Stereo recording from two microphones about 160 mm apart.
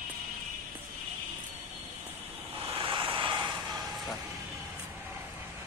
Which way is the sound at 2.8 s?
30° right (ahead or behind).